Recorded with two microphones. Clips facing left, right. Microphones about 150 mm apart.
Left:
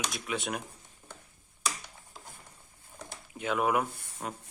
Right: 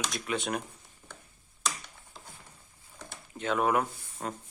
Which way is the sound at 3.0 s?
10° left (ahead or behind).